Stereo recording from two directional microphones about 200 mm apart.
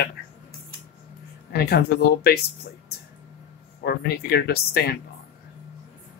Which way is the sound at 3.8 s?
55° left (ahead or behind).